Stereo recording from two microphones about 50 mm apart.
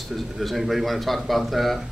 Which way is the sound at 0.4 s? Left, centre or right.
Centre.